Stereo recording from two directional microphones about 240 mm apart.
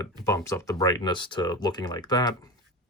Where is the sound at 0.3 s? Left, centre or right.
Centre.